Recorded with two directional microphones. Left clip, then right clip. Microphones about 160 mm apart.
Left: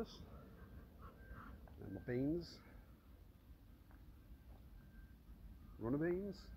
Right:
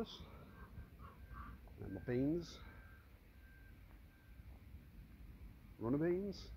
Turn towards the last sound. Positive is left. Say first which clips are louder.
# right 2 dB
turn(degrees=-20)  # may be behind; listen again after turning